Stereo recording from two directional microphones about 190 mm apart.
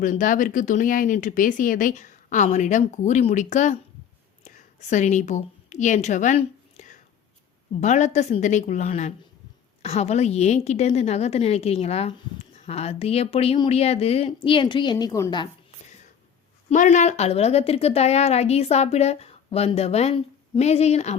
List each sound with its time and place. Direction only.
0.0 s speech: 45° left (ahead or behind)
4.4 s a sound: 40° left (ahead or behind)
7.7 s a woman's voice: 40° left (ahead or behind); by 15.4 s 20° left (ahead or behind)
16.6 s speech: 40° left (ahead or behind)